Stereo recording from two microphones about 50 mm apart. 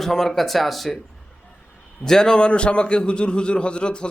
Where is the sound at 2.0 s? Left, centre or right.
Centre.